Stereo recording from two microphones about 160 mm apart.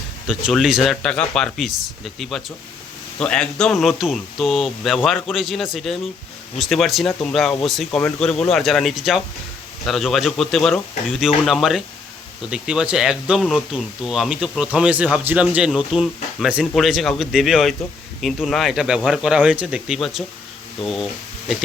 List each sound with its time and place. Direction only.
0.3 s speech: 5° right (ahead or behind)